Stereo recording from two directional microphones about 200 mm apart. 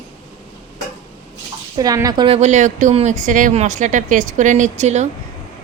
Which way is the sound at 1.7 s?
20° right (ahead or behind).